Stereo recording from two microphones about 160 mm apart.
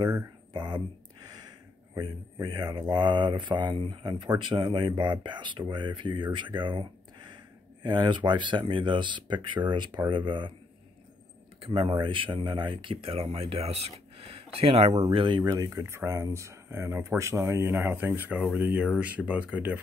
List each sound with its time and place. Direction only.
0.5 s a sound: 25° right (ahead or behind)
2.0 s speech: 25° right (ahead or behind)
11.6 s speech: 35° right (ahead or behind); by 19.8 s 10° right (ahead or behind)